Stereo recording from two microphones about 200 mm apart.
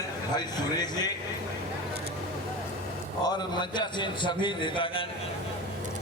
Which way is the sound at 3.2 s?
20° left (ahead or behind).